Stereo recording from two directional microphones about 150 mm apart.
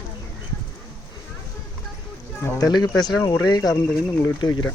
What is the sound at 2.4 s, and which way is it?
Speech, 25° left (ahead or behind).